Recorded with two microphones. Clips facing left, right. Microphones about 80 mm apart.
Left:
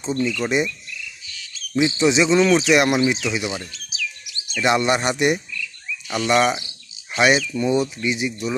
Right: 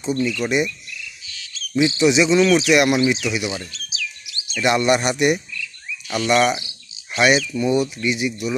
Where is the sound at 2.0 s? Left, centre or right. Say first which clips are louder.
Right 1 dB; left.